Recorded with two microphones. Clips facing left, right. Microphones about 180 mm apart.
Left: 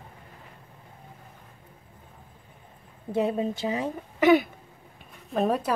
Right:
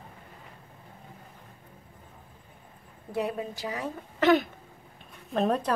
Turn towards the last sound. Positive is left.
turn(degrees=5)  # may be behind; listen again after turning